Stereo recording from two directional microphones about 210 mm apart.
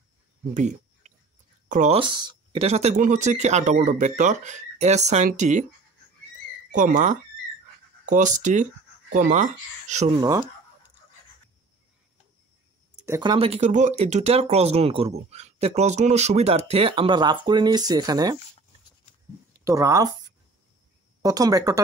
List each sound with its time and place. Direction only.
0.6 s a sound: 35° right (ahead or behind)
1.7 s speech: 35° right (ahead or behind)
2.0 s speech: 25° right (ahead or behind)
6.7 s speech: 40° right (ahead or behind)
13.0 s speech: 15° right (ahead or behind)
19.6 s speech: 15° right (ahead or behind)